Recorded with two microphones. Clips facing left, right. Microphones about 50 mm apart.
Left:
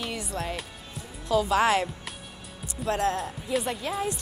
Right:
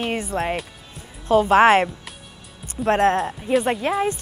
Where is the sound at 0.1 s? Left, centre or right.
Right.